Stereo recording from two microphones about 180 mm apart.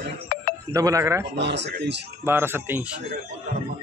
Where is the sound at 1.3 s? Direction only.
75° right (ahead or behind).